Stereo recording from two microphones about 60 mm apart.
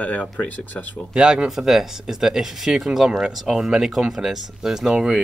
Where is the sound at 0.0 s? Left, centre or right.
Left.